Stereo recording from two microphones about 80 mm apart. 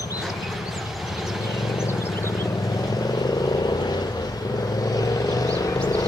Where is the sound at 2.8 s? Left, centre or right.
Left.